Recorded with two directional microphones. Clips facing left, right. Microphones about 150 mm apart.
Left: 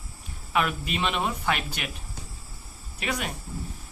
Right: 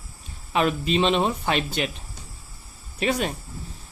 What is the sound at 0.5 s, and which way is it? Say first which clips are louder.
Speech: right 5 dB; 30° right (ahead or behind).